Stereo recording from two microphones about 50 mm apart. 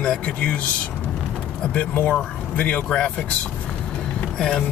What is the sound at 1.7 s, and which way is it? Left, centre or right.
Speech, left.